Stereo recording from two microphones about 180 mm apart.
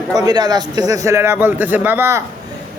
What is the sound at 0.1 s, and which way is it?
A man's voice, 20° right (ahead or behind).